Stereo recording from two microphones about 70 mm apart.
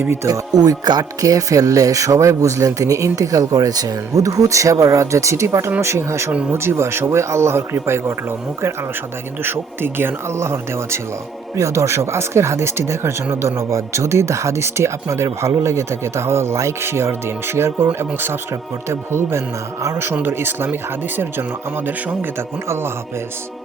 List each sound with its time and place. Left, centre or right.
0.0 s speech: right
0.3 s speech: right
9.4 s speech: right
21.8 s speech: right